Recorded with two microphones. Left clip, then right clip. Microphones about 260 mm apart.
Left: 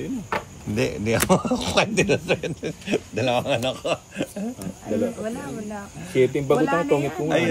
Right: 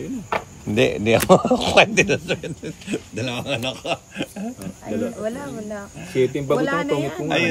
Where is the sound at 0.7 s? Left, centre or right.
Right.